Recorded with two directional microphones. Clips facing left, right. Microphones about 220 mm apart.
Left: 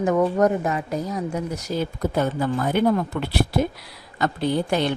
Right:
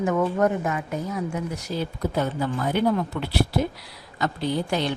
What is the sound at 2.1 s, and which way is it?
Speech, 50° left (ahead or behind).